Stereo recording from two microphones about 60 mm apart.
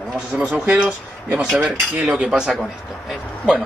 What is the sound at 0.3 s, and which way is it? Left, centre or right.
Cutlery, centre.